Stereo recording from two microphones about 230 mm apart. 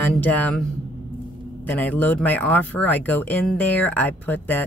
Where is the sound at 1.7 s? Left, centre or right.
Centre.